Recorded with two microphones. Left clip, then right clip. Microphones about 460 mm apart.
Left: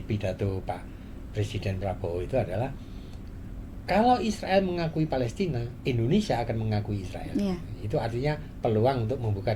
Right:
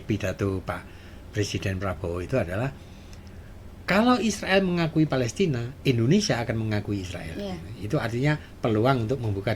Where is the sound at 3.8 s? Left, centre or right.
Right.